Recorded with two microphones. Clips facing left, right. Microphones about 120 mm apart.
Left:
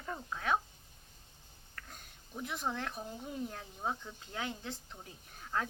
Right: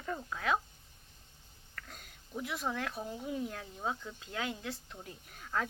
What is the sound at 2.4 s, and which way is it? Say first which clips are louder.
A woman's voice: right 1 dB; 25° left (ahead or behind).